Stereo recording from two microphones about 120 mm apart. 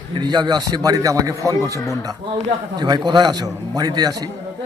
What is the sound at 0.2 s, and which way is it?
A man's voice, 35° right (ahead or behind).